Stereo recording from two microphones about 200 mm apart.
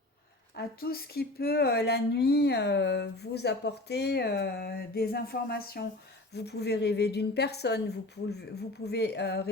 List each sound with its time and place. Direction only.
0.5 s speech: 50° left (ahead or behind)